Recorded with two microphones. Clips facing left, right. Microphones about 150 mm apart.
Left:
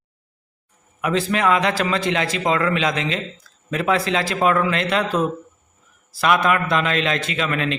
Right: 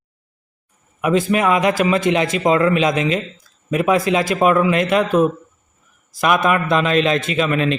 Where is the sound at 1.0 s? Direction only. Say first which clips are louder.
Right 4 dB; 15° right (ahead or behind).